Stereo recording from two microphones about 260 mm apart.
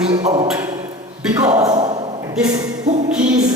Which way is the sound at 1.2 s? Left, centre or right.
Centre.